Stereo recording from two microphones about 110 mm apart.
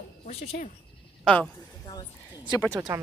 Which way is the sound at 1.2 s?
5° left (ahead or behind).